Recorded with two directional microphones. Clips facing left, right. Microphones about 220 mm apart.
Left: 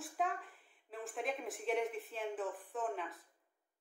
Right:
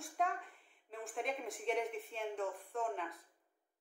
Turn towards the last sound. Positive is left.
turn(degrees=0)  # may be behind; listen again after turning